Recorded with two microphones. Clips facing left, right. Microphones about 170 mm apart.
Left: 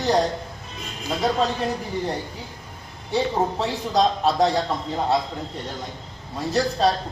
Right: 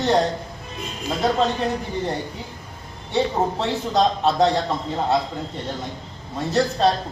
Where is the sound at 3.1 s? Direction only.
Centre (ahead or behind).